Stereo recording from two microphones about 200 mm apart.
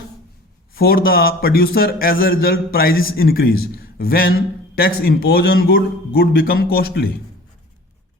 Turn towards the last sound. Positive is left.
turn(degrees=50)  # may be behind; listen again after turning